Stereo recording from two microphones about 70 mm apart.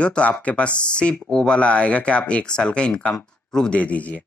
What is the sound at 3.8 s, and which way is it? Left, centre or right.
Speech, left.